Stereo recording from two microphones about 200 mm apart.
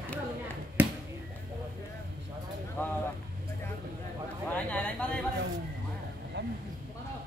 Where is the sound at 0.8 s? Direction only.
10° right (ahead or behind).